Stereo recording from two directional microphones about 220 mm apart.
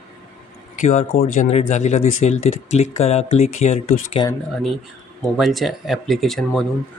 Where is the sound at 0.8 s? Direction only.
40° left (ahead or behind).